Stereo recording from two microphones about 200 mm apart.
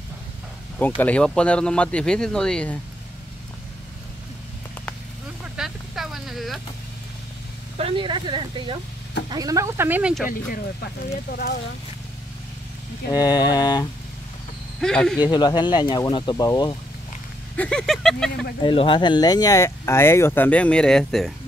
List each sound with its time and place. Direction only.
0.7 s speech: 10° left (ahead or behind)
5.6 s a sound: centre (ahead or behind)
7.7 s speech: 25° right (ahead or behind); by 10.2 s 5° right (ahead or behind)
10.3 s speech: 45° left (ahead or behind)
13.3 s speech: 20° left (ahead or behind)
14.8 s speech: 5° left (ahead or behind)
15.2 s speech: 20° left (ahead or behind)
17.6 s speech: 5° left (ahead or behind)
18.6 s speech: 25° left (ahead or behind); by 21.3 s centre (ahead or behind)